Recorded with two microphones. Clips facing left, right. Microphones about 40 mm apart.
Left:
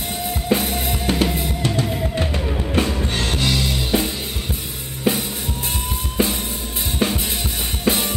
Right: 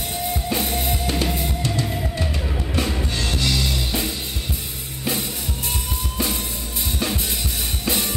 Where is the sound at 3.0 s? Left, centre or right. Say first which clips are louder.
Left 3 dB; left.